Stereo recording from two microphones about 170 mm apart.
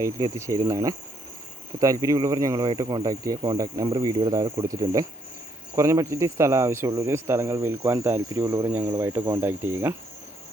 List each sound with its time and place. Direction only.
0.0 s speech: 20° right (ahead or behind)